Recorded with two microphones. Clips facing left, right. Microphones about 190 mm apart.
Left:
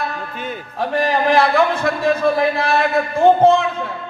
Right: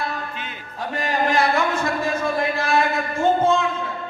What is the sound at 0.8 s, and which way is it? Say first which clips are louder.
A man's voice: left 5 dB; 65° left (ahead or behind).